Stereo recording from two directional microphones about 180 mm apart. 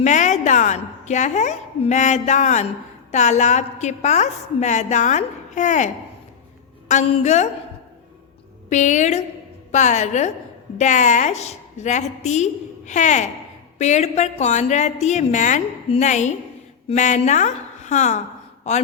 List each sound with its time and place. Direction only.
0.0 s a woman's voice: 40° left (ahead or behind)
8.7 s a woman's voice: 40° left (ahead or behind)